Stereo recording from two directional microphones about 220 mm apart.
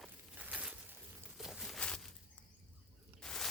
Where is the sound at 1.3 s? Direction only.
Centre (ahead or behind).